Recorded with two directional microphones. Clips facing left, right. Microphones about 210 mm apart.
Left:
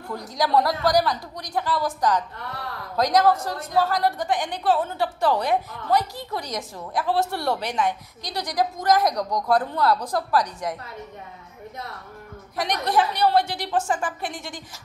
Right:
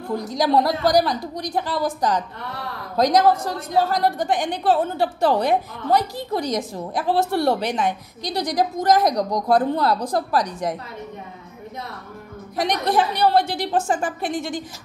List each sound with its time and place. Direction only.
0.1 s a woman's voice: 20° right (ahead or behind)
12.5 s a woman's voice: 25° right (ahead or behind)